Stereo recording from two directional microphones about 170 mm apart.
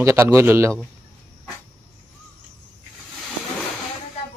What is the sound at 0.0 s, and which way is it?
Speech, 15° right (ahead or behind).